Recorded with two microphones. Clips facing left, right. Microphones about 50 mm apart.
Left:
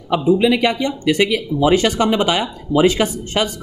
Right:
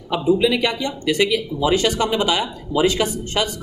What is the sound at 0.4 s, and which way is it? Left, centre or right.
Speech, left.